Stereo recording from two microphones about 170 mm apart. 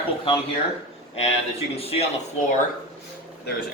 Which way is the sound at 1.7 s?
35° left (ahead or behind).